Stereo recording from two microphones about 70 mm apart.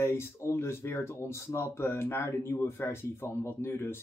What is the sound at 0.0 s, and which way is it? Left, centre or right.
Speech, left.